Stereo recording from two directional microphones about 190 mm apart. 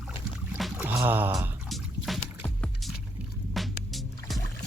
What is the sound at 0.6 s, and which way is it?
Speech, 5° right (ahead or behind).